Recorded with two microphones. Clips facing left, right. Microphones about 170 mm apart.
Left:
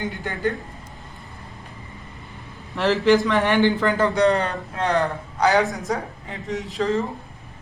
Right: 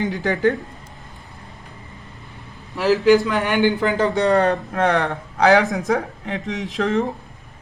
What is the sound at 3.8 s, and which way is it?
Speech, 20° right (ahead or behind).